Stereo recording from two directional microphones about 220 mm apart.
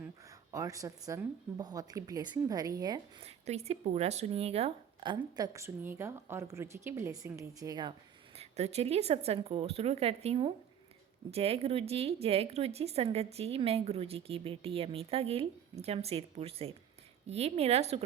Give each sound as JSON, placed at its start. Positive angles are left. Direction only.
{"t": 0.5, "sound": "a woman's voice", "side_deg": -15}
{"t": 8.4, "sound": "speech", "side_deg": -30}